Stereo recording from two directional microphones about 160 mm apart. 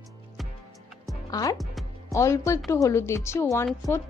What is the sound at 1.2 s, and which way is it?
A woman's voice, 25° left (ahead or behind).